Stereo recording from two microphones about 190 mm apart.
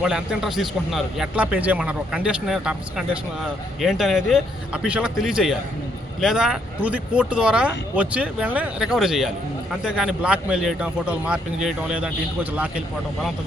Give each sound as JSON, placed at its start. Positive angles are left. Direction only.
{"t": 0.0, "sound": "a man's voice", "side_deg": 0}